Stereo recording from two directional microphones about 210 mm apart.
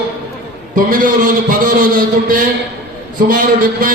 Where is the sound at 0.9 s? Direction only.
40° right (ahead or behind).